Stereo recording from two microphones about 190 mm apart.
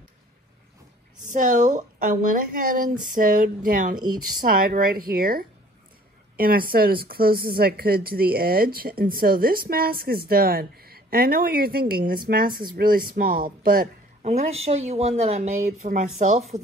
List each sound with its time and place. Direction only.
1.2 s speech: 40° right (ahead or behind)
14.2 s speech: 35° right (ahead or behind)